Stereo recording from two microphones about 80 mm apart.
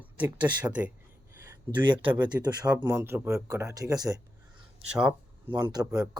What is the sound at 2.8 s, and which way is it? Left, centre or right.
Speech, right.